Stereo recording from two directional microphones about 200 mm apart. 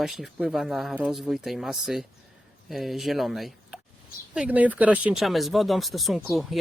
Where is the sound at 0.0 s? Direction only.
Centre (ahead or behind).